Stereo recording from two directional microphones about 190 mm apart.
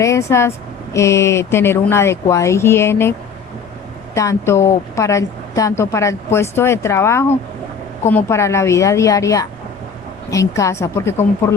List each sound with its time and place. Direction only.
0.0 s a woman's voice: 15° left (ahead or behind)